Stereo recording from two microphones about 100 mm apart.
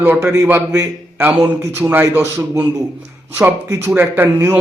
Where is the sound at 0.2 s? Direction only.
30° right (ahead or behind).